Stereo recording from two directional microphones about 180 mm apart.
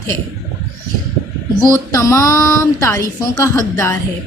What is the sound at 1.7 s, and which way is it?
A woman's voice, 15° left (ahead or behind).